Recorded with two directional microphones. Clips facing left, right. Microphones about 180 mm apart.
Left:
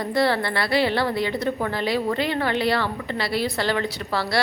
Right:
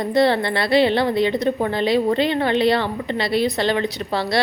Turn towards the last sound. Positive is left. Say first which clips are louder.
# right 3 dB
turn(degrees=-20)  # may be behind; listen again after turning